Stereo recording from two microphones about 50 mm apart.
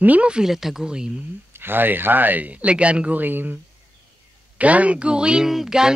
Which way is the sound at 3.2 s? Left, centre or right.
Right.